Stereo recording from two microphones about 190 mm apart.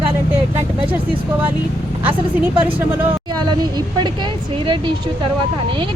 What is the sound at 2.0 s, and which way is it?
Speech, 10° right (ahead or behind).